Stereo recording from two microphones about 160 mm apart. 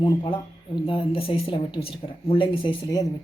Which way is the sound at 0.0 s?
30° left (ahead or behind).